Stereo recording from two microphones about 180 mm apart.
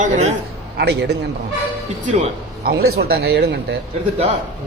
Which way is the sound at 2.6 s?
60° right (ahead or behind).